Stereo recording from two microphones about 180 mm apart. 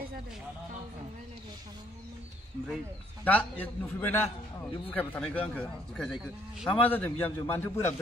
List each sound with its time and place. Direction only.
3.3 s a man's voice: 10° left (ahead or behind)